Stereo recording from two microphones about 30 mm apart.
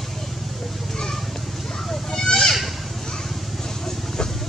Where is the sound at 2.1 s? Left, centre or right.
Left.